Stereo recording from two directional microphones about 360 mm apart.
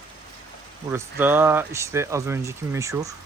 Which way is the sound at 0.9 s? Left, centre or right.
Centre.